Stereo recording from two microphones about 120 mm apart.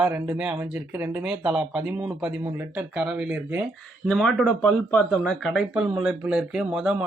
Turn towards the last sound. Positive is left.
turn(degrees=-5)  # may be behind; listen again after turning